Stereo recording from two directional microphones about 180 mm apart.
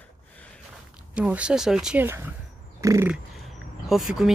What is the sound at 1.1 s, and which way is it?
Speech, 5° right (ahead or behind).